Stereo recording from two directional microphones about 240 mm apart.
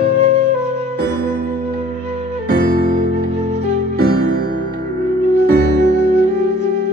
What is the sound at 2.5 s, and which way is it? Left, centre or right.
Music, right.